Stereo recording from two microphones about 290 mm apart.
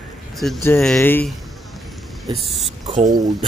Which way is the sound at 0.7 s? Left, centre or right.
Centre.